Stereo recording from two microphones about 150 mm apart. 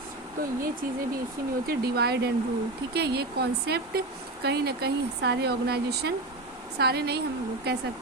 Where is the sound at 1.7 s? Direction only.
90° right.